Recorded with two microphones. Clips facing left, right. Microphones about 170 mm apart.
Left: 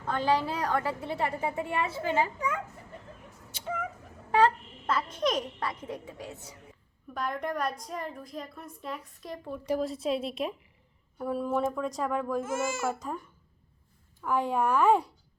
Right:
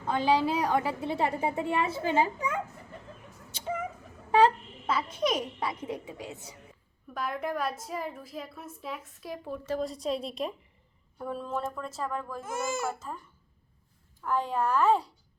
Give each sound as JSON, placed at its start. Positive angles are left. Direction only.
{"t": 0.1, "sound": "a woman's voice", "side_deg": -10}
{"t": 4.3, "sound": "babbling", "side_deg": -15}
{"t": 4.9, "sound": "a woman's voice", "side_deg": -5}
{"t": 7.1, "sound": "a woman's voice", "side_deg": -5}
{"t": 12.5, "sound": "a woman's voice", "side_deg": -15}
{"t": 14.3, "sound": "speech", "side_deg": 10}